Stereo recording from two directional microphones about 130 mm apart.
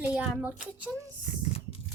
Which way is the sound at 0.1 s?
10° right (ahead or behind).